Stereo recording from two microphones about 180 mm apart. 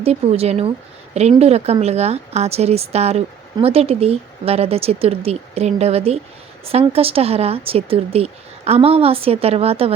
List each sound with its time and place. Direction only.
0.0 s a woman's voice: 35° right (ahead or behind)